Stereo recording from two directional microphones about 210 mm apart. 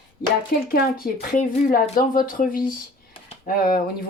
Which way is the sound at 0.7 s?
45° left (ahead or behind).